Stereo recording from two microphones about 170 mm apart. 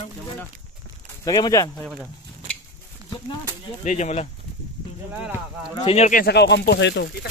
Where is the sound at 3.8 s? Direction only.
45° left (ahead or behind).